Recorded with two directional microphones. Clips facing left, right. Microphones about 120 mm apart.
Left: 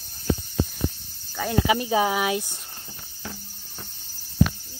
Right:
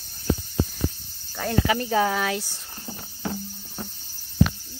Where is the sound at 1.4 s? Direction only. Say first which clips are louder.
Left 1 dB; 10° left (ahead or behind).